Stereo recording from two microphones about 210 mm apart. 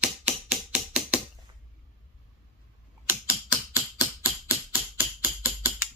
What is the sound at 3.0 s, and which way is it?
Typing, 10° right (ahead or behind).